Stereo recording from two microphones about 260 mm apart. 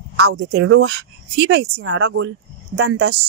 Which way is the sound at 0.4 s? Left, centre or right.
Right.